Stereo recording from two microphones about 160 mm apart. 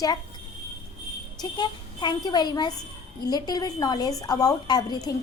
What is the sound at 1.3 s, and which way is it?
A woman's voice, 25° left (ahead or behind).